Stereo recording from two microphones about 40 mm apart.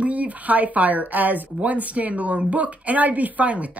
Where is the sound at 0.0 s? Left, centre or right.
Right.